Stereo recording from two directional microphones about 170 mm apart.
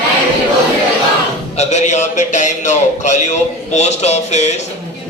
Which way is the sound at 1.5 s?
45° left (ahead or behind).